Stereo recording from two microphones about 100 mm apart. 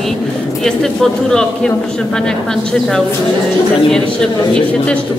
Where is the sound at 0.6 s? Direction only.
5° left (ahead or behind).